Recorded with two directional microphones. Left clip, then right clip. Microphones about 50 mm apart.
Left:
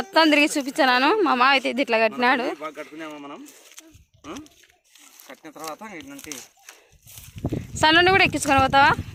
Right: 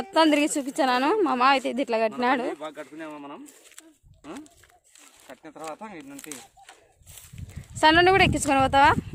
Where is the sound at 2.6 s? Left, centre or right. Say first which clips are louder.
Left 3 dB; right.